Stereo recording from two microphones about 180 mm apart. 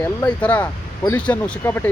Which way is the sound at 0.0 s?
10° left (ahead or behind).